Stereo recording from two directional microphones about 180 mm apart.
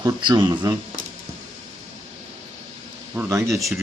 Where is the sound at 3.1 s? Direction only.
15° right (ahead or behind).